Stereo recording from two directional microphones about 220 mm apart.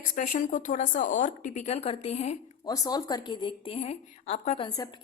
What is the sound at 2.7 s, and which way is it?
A woman's voice, 15° left (ahead or behind).